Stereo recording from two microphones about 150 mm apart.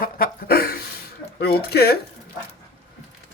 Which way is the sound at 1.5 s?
90° left.